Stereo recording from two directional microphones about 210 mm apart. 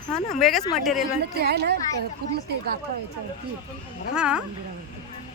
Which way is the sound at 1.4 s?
50° right (ahead or behind).